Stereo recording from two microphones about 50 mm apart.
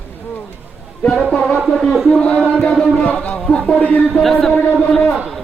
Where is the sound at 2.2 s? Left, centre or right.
Left.